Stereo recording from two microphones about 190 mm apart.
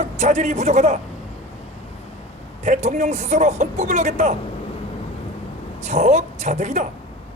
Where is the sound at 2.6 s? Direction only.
35° right (ahead or behind).